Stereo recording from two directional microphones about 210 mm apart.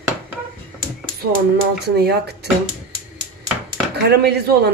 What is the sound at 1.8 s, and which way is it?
Speech, 50° right (ahead or behind).